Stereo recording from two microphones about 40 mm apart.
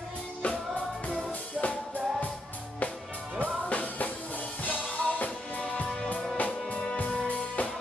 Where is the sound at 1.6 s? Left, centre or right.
Left.